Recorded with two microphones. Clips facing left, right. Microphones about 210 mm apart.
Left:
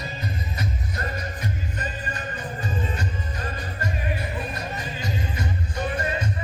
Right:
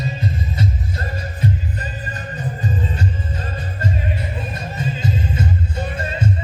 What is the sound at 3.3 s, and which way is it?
Music, 25° right (ahead or behind).